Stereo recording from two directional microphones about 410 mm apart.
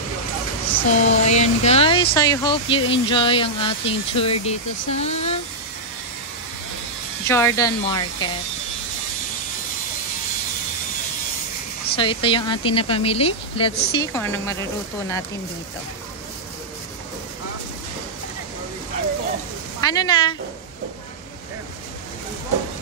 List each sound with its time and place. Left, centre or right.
0.7 s a sound: centre
1.2 s speech: centre
7.2 s speech: centre
11.9 s speech: centre
19.8 s speech: centre